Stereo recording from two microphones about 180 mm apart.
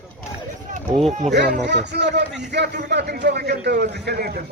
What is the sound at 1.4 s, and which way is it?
A man's voice, 70° right (ahead or behind).